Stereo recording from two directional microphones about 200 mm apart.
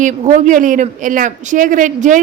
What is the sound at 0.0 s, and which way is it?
A woman's voice, 40° right (ahead or behind).